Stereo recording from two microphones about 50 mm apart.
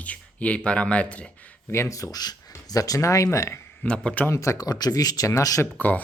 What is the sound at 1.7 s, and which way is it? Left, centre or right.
Speech, left.